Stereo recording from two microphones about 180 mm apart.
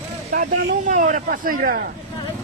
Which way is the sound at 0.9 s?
45° right (ahead or behind).